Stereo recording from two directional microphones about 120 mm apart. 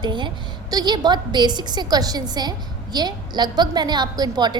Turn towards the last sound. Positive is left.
turn(degrees=-35)  # may be behind; listen again after turning